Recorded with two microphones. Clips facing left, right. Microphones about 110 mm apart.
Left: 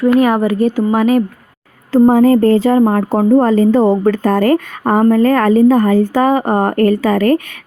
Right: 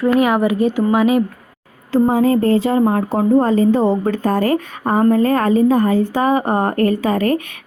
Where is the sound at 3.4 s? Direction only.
75° left (ahead or behind).